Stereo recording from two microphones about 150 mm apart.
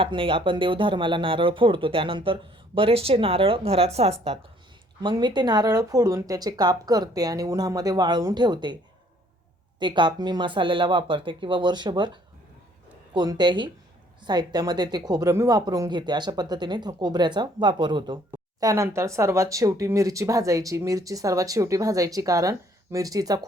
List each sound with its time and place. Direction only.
0.0 s speech: 35° right (ahead or behind)
5.0 s speech: 30° right (ahead or behind)
18.7 s speech: 20° right (ahead or behind)